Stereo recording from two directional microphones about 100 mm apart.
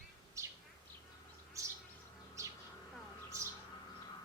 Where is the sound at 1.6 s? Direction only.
30° right (ahead or behind).